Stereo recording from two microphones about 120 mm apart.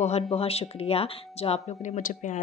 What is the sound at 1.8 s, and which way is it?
Speech, 90° left.